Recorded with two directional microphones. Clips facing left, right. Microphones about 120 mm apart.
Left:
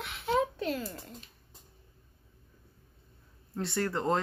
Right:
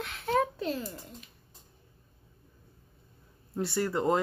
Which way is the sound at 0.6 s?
30° right (ahead or behind).